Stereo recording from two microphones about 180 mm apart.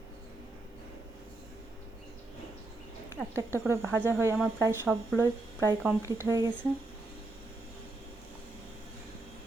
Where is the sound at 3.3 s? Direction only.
15° right (ahead or behind).